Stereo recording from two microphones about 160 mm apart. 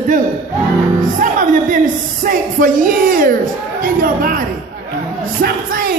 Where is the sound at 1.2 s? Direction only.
55° right (ahead or behind).